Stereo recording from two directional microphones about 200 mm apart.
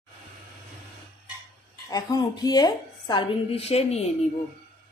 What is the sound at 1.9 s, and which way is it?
Speech, 20° left (ahead or behind).